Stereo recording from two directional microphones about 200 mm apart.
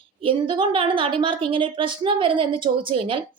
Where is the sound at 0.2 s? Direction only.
25° right (ahead or behind).